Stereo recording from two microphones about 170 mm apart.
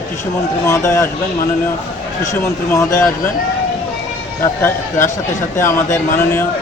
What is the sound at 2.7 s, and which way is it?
Speech, 20° left (ahead or behind).